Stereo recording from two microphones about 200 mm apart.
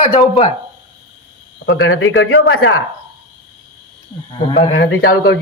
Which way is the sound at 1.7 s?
85° left.